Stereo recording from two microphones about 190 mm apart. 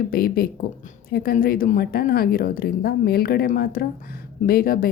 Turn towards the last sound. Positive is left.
turn(degrees=50)  # may be behind; listen again after turning